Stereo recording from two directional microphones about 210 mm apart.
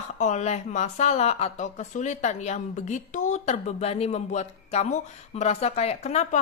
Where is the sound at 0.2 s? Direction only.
35° left (ahead or behind).